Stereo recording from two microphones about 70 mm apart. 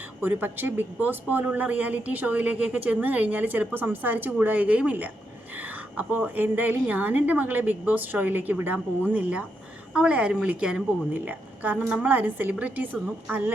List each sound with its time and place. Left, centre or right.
0.2 s a woman's voice: right